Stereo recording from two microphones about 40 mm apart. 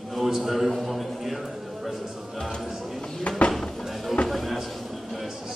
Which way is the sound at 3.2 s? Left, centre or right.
Left.